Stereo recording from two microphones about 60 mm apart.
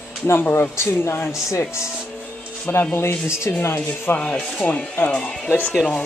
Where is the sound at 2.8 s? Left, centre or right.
Left.